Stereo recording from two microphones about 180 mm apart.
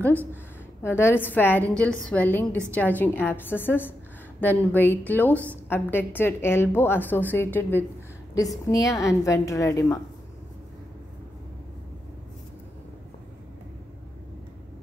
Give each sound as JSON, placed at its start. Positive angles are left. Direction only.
{"t": 0.8, "sound": "a woman's voice", "side_deg": 15}